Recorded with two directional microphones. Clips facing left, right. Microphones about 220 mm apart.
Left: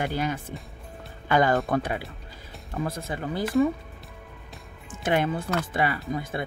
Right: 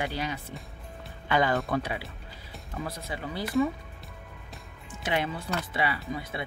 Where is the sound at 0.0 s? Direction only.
50° left (ahead or behind).